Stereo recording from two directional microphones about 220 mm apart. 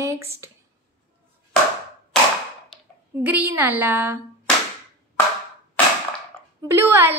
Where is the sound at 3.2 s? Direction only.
10° right (ahead or behind).